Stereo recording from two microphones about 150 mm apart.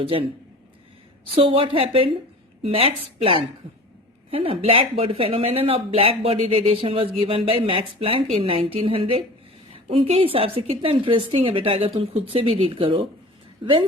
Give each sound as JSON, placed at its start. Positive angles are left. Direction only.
{"t": 0.0, "sound": "speech", "side_deg": -40}
{"t": 1.4, "sound": "speech", "side_deg": -35}